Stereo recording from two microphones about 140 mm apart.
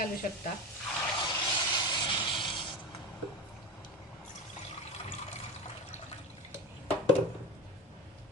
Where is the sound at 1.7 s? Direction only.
30° left (ahead or behind).